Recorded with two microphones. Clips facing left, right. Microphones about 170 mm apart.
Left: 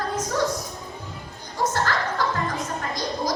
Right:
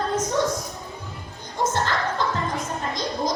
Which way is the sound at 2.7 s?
20° right (ahead or behind).